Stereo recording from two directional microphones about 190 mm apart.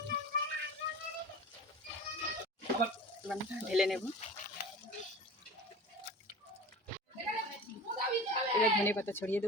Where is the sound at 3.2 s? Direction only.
Centre (ahead or behind).